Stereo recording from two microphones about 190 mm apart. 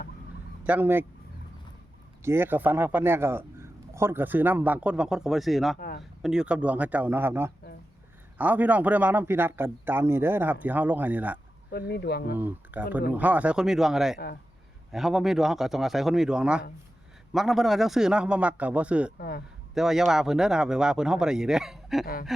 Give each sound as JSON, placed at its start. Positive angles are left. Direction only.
{"t": 0.6, "sound": "speech", "side_deg": -10}
{"t": 2.2, "sound": "a man's voice", "side_deg": -10}
{"t": 11.7, "sound": "speech", "side_deg": 60}
{"t": 12.7, "sound": "a man's voice", "side_deg": -10}
{"t": 22.0, "sound": "a sound", "side_deg": 50}